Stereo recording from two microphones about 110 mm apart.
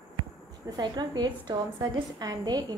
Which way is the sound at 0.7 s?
40° right (ahead or behind).